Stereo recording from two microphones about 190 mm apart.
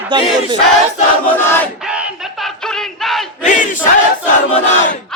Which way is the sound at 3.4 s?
40° left (ahead or behind).